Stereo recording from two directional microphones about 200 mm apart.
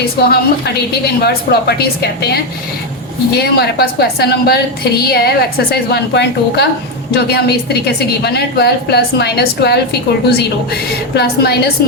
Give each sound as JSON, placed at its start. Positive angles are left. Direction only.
{"t": 0.0, "sound": "a woman's voice", "side_deg": 50}